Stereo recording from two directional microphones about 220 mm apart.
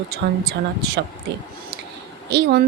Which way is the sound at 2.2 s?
50° right (ahead or behind).